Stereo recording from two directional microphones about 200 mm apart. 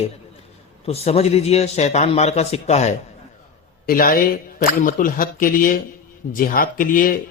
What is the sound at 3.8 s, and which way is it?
Speech, 45° left (ahead or behind).